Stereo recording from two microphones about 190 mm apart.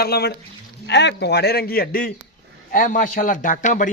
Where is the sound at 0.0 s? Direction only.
55° left (ahead or behind).